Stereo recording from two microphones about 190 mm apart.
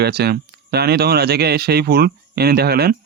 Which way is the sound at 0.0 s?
60° right (ahead or behind).